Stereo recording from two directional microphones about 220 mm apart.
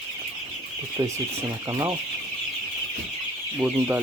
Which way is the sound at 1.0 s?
20° right (ahead or behind).